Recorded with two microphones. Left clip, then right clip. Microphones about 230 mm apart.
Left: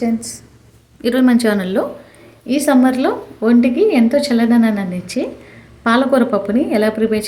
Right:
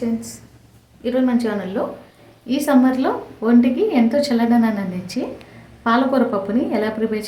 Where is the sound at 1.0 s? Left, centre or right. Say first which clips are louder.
Left 5 dB; left.